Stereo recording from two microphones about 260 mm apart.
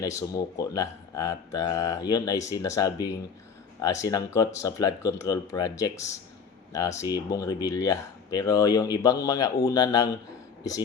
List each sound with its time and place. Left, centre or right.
0.0 s speech: centre